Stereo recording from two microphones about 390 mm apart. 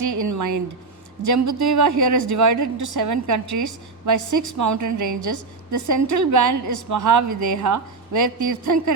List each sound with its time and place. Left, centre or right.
0.0 s a sound: right
1.2 s a woman's voice: right
2.7 s a woman's voice: right